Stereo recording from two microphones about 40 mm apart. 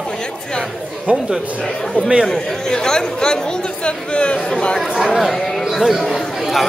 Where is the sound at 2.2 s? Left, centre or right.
Centre.